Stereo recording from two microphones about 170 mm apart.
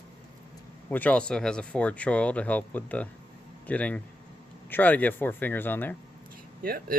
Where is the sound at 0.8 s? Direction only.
10° left (ahead or behind).